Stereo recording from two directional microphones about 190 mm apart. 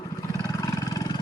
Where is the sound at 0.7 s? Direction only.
20° left (ahead or behind).